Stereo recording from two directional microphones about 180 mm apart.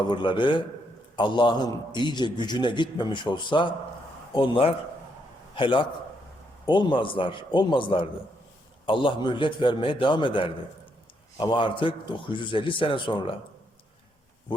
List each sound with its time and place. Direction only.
0.0 s a man's voice: 25° left (ahead or behind)